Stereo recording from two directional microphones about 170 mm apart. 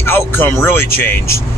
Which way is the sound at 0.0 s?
15° left (ahead or behind).